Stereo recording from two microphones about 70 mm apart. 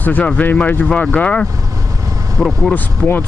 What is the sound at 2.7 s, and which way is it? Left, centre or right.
Speech, left.